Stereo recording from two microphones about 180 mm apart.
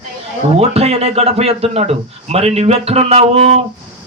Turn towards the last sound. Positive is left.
turn(degrees=-35)  # may be behind; listen again after turning